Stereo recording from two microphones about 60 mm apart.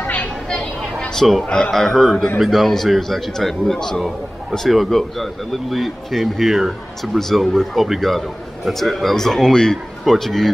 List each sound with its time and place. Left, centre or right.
0.0 s vehicle: left
1.1 s a man's voice: centre